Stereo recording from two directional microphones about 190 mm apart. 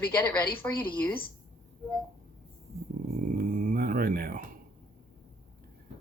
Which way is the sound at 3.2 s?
45° right (ahead or behind).